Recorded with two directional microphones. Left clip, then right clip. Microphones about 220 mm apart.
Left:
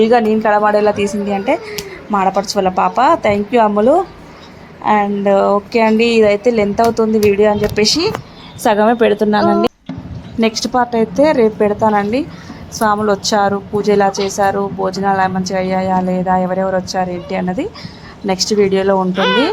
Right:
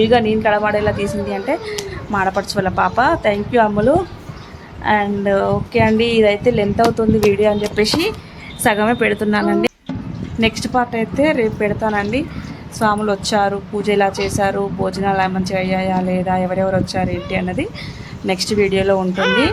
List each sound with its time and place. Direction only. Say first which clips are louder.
0.1 s a woman's voice: left 3 dB; 15° left (ahead or behind)
19.1 s speech: left 2 dB; 35° left (ahead or behind)